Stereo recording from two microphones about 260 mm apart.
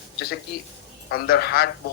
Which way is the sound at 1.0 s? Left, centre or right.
Left.